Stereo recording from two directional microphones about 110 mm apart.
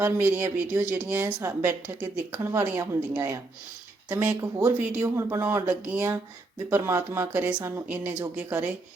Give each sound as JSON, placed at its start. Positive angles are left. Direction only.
{"t": 0.0, "sound": "speech", "side_deg": -20}
{"t": 4.1, "sound": "speech", "side_deg": -15}